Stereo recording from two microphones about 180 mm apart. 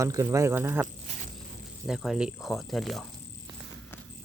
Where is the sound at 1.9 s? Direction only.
Centre (ahead or behind).